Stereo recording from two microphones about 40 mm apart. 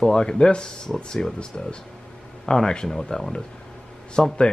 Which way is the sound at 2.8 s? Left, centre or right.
Centre.